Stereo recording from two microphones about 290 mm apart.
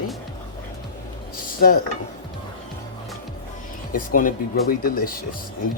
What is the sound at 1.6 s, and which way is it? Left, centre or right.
Speech, left.